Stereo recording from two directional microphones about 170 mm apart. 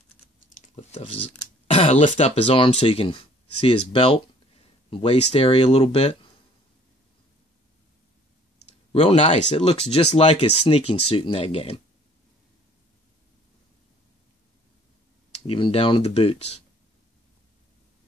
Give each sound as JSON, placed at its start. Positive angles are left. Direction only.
{"t": 0.7, "sound": "speech", "side_deg": 35}
{"t": 8.9, "sound": "speech", "side_deg": 35}
{"t": 15.3, "sound": "speech", "side_deg": 35}